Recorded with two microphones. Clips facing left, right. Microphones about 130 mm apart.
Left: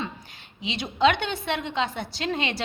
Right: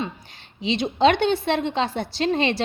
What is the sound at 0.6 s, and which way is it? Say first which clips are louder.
A woman's voice: right 4 dB; 30° right (ahead or behind).